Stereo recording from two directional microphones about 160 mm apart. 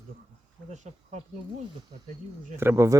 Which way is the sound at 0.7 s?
50° right (ahead or behind).